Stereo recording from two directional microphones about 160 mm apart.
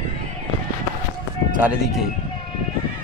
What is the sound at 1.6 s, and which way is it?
Speech, 10° right (ahead or behind).